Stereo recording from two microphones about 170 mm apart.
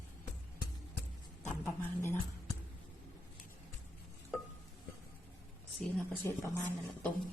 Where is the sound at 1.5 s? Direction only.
15° left (ahead or behind).